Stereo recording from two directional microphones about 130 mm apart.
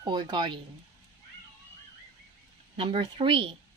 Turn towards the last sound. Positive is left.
turn(degrees=-45)  # may be behind; listen again after turning